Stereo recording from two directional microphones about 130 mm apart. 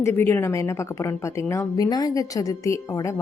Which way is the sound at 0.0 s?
20° left (ahead or behind).